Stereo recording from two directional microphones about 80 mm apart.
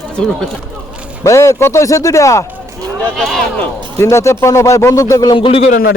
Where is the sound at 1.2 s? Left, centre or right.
Left.